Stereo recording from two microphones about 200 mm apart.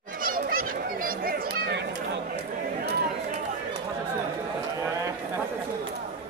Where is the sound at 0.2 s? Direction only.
45° right (ahead or behind).